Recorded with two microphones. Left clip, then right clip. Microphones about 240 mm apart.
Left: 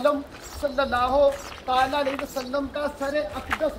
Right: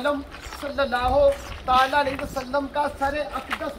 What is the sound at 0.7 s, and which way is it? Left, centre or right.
Speech, centre.